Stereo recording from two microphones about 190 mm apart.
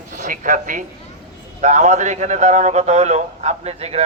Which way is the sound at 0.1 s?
40° right (ahead or behind).